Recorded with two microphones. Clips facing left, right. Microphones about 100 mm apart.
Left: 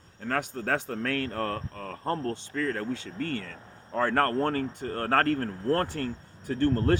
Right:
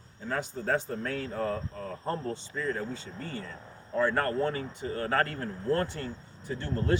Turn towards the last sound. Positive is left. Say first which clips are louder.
# left 7 dB
turn(degrees=55)  # may be behind; listen again after turning